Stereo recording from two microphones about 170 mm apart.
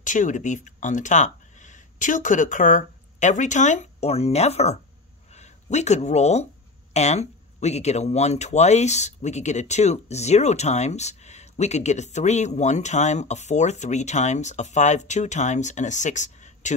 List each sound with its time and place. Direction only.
0.0 s speech: 50° left (ahead or behind)